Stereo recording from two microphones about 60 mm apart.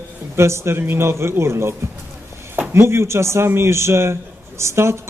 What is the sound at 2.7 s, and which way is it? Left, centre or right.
A man's voice, right.